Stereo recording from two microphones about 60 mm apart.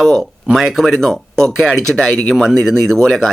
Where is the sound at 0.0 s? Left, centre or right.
Centre.